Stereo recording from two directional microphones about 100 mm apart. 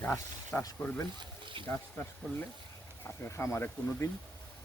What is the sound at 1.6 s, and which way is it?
Speech, 55° right (ahead or behind).